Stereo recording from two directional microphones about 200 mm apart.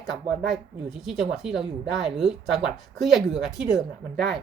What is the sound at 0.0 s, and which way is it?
Speech, centre (ahead or behind).